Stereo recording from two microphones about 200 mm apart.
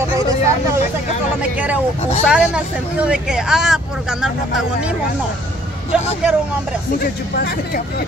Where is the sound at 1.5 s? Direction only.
5° right (ahead or behind).